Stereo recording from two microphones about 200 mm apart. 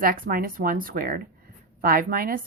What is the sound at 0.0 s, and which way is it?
Speech, 45° right (ahead or behind).